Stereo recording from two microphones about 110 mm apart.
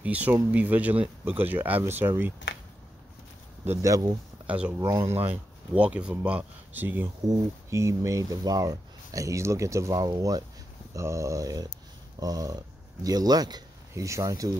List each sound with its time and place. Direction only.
0.0 s speech: 15° right (ahead or behind)
3.6 s speech: 20° right (ahead or behind)
4.5 s speech: 10° right (ahead or behind)
4.7 s speech: 30° right (ahead or behind)
5.3 s speech: 10° right (ahead or behind)
7.2 s speech: 25° right (ahead or behind)